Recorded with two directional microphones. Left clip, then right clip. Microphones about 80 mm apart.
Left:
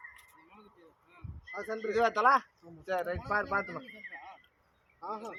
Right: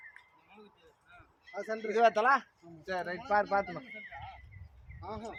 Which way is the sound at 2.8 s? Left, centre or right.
Right.